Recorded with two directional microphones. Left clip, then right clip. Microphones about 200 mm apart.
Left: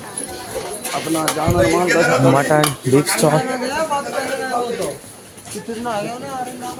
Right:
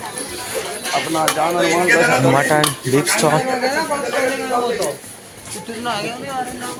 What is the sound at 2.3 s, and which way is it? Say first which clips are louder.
Speech: even; 25° left (ahead or behind).